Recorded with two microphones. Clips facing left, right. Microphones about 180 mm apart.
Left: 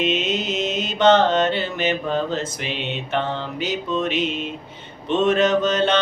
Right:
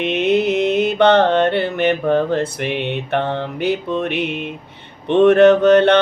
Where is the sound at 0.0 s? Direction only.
60° right (ahead or behind).